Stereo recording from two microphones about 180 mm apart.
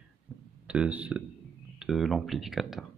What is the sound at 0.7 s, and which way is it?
Speech, 5° right (ahead or behind).